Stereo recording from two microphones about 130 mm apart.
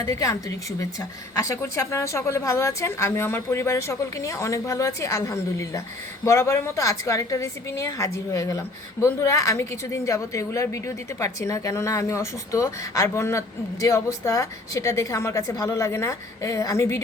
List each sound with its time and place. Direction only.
0.0 s a woman's voice: 25° left (ahead or behind)